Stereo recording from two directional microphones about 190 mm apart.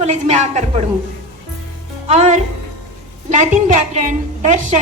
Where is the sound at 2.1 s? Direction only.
40° right (ahead or behind).